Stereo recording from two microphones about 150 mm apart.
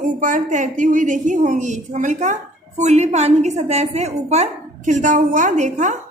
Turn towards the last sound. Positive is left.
turn(degrees=-55)  # may be behind; listen again after turning